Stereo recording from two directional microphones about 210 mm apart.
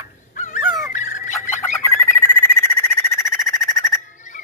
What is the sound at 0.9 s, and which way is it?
Fowl, 35° left (ahead or behind).